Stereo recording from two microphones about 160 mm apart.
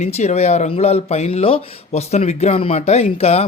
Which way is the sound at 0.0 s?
45° left (ahead or behind).